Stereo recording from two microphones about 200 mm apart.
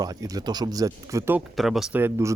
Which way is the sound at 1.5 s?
Centre (ahead or behind).